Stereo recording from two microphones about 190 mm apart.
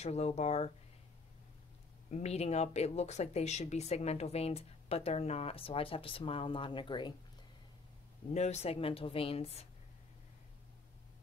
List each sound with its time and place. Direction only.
0.0 s speech: 35° left (ahead or behind)
2.0 s speech: 35° left (ahead or behind)
8.3 s speech: 35° left (ahead or behind)